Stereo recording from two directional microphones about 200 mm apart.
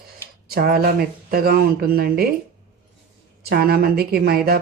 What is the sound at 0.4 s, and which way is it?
Speech, 50° right (ahead or behind).